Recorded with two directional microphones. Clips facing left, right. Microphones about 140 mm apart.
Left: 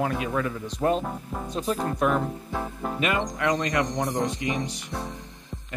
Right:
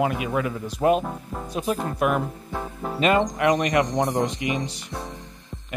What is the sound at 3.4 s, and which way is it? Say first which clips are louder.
Speech: right 4 dB; 20° right (ahead or behind).